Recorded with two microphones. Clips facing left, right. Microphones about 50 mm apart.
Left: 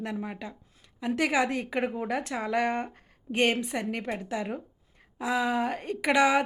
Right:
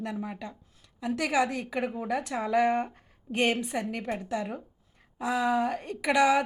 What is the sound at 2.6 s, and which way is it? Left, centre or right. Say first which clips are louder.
Speech: right 5 dB; centre.